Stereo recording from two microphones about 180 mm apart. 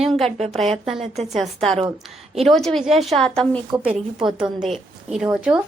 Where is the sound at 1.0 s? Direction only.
35° right (ahead or behind).